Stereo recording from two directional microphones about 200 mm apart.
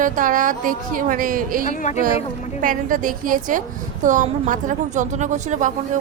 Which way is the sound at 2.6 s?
45° right (ahead or behind).